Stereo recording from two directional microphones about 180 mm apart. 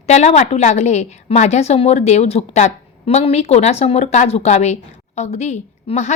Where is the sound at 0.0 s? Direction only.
40° left (ahead or behind).